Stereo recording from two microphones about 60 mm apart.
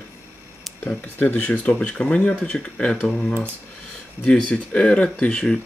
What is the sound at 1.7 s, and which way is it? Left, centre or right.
Speech, centre.